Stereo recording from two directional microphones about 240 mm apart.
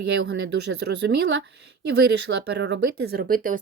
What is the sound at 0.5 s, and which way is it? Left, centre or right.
Speech, right.